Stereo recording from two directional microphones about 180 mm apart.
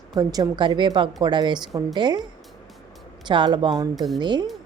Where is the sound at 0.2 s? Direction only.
20° right (ahead or behind).